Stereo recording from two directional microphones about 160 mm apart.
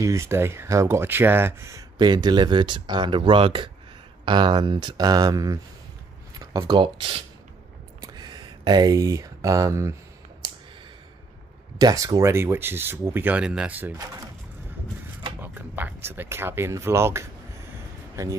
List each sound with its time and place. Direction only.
0.0 s speech: 20° right (ahead or behind); by 7.2 s 35° right (ahead or behind)
8.0 s a sound: 25° right (ahead or behind)
11.8 s speech: 20° right (ahead or behind)
15.4 s speech: 10° right (ahead or behind)